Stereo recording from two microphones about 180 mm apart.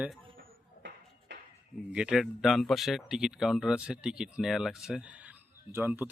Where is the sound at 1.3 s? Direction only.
75° right (ahead or behind).